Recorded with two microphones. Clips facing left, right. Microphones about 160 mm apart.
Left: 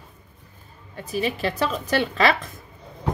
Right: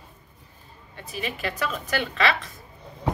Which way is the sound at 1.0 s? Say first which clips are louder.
Left 6 dB; 35° left (ahead or behind).